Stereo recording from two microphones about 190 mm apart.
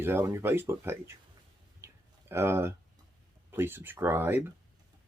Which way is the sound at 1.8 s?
15° right (ahead or behind).